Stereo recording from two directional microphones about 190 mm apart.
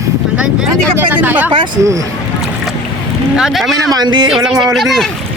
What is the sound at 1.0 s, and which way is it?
Speech, 10° right (ahead or behind).